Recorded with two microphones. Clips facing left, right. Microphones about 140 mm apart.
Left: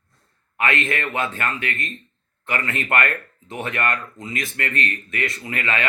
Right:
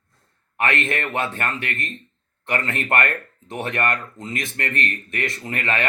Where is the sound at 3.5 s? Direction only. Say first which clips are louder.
Right 1 dB; 25° right (ahead or behind).